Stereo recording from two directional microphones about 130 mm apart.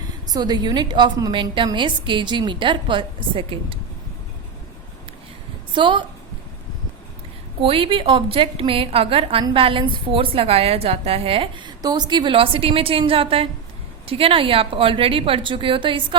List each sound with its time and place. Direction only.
0.3 s a woman's voice: 30° right (ahead or behind)
5.7 s a woman's voice: 40° right (ahead or behind)
7.6 s a woman's voice: 45° right (ahead or behind)